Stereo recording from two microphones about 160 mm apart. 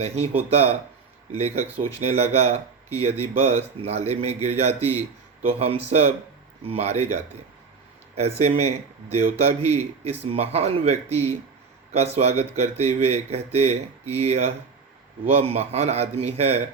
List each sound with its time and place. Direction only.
0.0 s speech: 40° right (ahead or behind)